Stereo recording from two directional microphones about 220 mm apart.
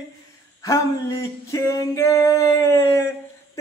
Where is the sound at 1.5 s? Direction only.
15° left (ahead or behind).